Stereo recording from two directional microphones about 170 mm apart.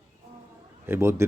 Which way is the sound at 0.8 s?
15° right (ahead or behind).